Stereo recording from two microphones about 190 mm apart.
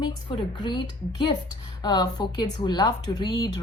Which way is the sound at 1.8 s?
20° left (ahead or behind).